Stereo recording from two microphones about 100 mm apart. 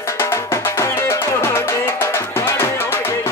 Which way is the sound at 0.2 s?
25° left (ahead or behind).